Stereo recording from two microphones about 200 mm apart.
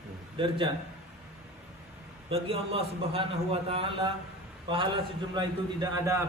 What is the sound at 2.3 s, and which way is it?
A man's voice, 30° right (ahead or behind).